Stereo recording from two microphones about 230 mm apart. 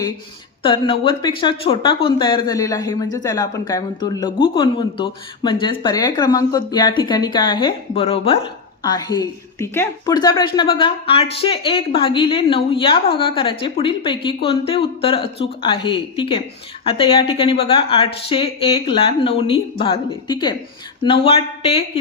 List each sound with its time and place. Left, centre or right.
0.6 s speech: left